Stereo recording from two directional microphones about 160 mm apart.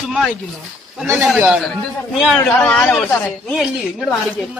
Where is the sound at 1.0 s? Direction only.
5° right (ahead or behind).